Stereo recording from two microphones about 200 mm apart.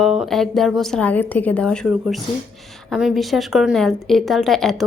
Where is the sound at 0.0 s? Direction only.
Centre (ahead or behind).